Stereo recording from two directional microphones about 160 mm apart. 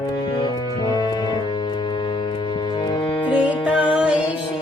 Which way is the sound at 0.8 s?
25° left (ahead or behind).